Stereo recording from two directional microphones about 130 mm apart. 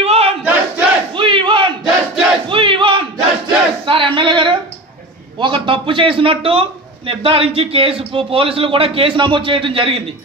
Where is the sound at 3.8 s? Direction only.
40° right (ahead or behind).